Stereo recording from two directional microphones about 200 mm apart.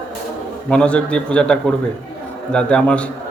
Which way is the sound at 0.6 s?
5° left (ahead or behind).